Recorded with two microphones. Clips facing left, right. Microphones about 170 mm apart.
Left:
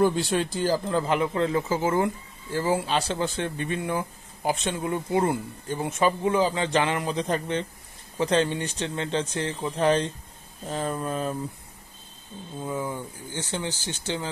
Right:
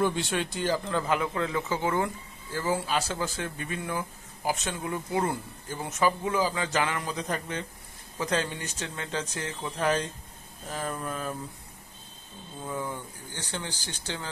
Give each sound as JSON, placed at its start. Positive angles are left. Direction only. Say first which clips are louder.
{"t": 0.0, "sound": "a man's voice", "louder": "left 5 dB", "side_deg": 35}
{"t": 12.6, "sound": "speech", "louder": "left 3 dB", "side_deg": 15}